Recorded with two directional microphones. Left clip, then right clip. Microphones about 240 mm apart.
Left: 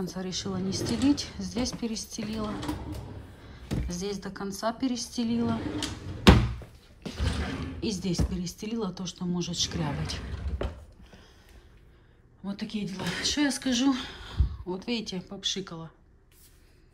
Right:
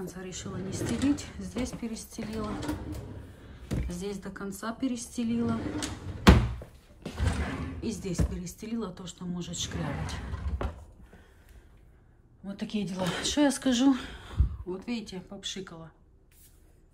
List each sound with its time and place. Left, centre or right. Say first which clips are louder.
0.0 s a woman's voice: left 5 dB; centre
7.3 s speech: left 1 dB; centre
12.4 s a woman's voice: even; centre